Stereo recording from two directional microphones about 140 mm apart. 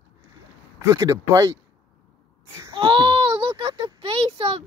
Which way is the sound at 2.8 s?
35° right (ahead or behind).